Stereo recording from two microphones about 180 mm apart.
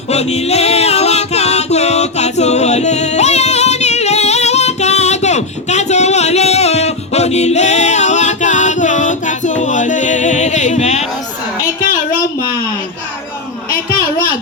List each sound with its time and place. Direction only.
0.1 s music: 35° left (ahead or behind)